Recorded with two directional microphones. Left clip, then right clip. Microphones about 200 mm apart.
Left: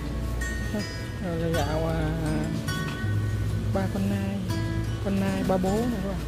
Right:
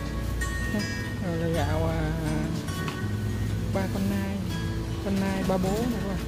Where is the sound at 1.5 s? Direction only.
Centre (ahead or behind).